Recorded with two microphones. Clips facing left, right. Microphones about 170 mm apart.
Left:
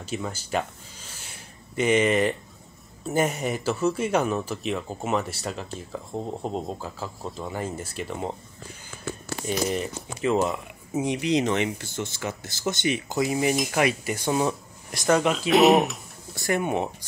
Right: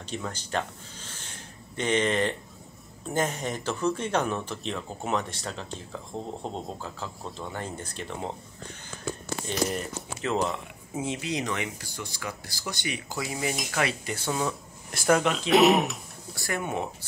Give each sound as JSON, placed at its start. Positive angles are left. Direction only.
{"t": 0.0, "sound": "speech", "side_deg": 10}
{"t": 9.5, "sound": "speech", "side_deg": 0}
{"t": 11.1, "sound": "speech", "side_deg": 20}
{"t": 14.9, "sound": "speech", "side_deg": -5}
{"t": 16.3, "sound": "speech", "side_deg": 20}